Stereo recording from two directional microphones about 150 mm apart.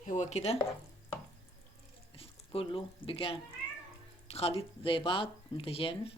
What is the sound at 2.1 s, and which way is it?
Speech, 40° left (ahead or behind).